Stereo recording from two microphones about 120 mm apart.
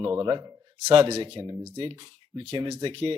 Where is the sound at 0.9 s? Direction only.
55° right (ahead or behind).